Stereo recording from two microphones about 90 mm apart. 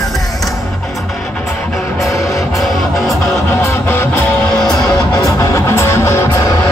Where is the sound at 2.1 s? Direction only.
30° left (ahead or behind).